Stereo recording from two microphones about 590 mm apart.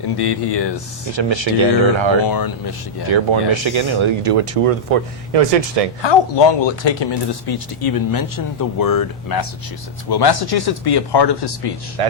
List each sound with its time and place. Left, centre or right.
0.2 s speech: left
1.1 s speech: right
2.2 s speech: left
3.1 s speech: right
6.0 s speech: left
12.0 s speech: right